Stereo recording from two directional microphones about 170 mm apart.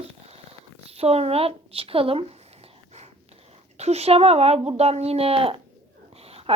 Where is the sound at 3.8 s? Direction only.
40° right (ahead or behind).